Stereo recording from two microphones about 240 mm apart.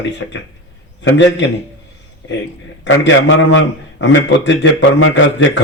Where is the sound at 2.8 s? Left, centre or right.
Left.